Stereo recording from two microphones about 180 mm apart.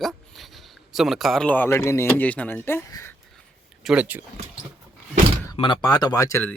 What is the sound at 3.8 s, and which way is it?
Speech, 5° right (ahead or behind).